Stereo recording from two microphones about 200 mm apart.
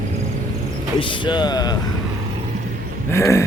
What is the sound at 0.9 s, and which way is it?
Speech, 25° left (ahead or behind).